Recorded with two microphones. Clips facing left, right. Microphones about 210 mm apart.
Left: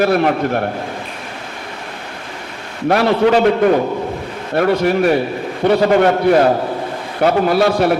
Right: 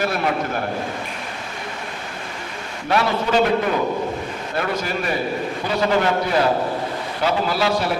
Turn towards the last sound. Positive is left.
turn(degrees=55)  # may be behind; listen again after turning